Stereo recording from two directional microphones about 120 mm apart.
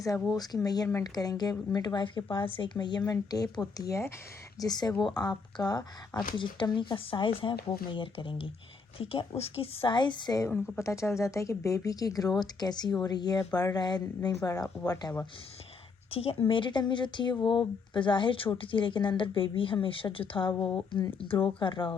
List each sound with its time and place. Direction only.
0.3 s a woman's voice: 35° left (ahead or behind)
16.0 s speech: 55° left (ahead or behind)
16.5 s a woman's voice: 40° left (ahead or behind)